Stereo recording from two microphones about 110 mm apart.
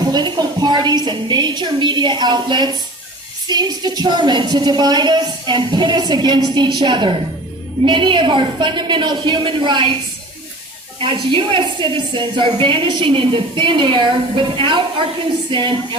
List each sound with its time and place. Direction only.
0.0 s a woman's voice: 40° right (ahead or behind)
11.0 s a woman's voice: 50° right (ahead or behind)